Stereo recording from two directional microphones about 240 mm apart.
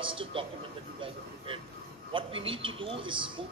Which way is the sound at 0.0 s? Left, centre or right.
Right.